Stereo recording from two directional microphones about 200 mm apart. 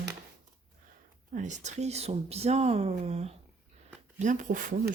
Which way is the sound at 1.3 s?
35° right (ahead or behind).